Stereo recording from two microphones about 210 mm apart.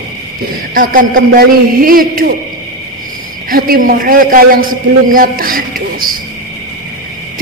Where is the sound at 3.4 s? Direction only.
45° right (ahead or behind).